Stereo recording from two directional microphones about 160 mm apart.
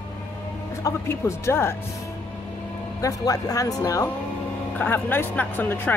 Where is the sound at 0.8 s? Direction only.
15° left (ahead or behind).